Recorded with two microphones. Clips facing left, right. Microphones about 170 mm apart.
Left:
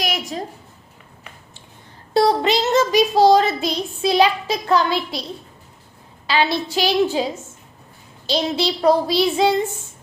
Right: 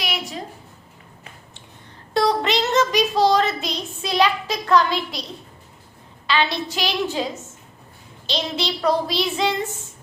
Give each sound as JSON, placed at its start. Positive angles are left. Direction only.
{"t": 0.0, "sound": "a sound", "side_deg": 45}
{"t": 2.1, "sound": "speech", "side_deg": 30}
{"t": 4.2, "sound": "child singing", "side_deg": 30}
{"t": 4.9, "sound": "a child's voice", "side_deg": 0}
{"t": 6.2, "sound": "a woman's voice", "side_deg": 35}
{"t": 8.3, "sound": "a woman's voice", "side_deg": 35}